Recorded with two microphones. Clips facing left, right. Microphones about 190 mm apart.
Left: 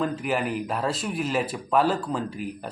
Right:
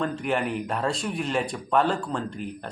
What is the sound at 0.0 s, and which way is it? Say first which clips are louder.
Speech: even; 5° left (ahead or behind).